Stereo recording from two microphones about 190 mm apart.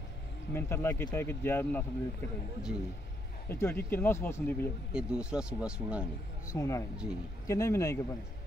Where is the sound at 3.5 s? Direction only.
10° left (ahead or behind).